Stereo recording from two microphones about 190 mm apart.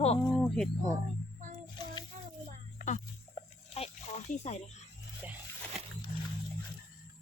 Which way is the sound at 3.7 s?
35° left (ahead or behind).